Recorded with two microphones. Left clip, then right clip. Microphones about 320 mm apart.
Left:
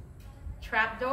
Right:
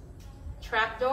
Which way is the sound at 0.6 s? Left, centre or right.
Right.